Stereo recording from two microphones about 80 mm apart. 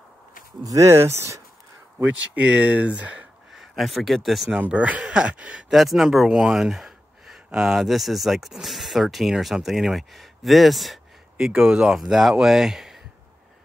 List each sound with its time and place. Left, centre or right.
0.7 s speech: right
2.3 s speech: centre
3.5 s speech: centre
4.6 s speech: centre